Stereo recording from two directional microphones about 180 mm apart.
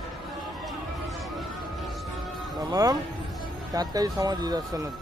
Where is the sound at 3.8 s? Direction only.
20° right (ahead or behind).